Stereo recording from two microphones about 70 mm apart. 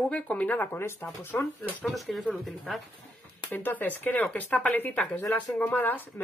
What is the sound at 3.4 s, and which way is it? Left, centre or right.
Speech, left.